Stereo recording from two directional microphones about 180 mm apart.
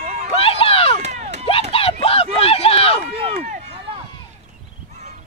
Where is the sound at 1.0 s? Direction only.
40° right (ahead or behind).